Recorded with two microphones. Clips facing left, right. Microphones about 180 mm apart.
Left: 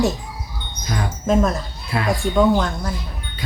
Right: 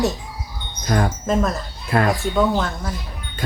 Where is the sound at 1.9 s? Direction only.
50° right (ahead or behind).